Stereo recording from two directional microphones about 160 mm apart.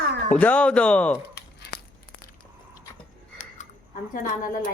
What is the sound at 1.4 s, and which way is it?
Crumpling, 90° left.